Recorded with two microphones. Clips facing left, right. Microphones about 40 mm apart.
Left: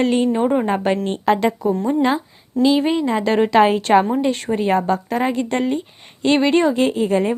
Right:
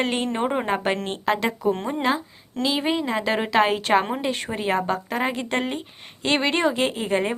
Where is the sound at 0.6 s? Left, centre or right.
Centre.